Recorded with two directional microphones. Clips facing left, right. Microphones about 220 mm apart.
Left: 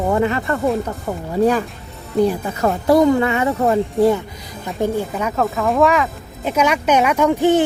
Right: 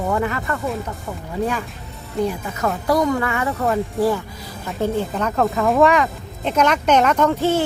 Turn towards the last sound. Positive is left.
turn(degrees=15)  # may be behind; listen again after turning